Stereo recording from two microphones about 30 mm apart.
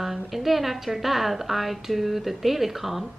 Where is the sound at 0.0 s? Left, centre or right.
Centre.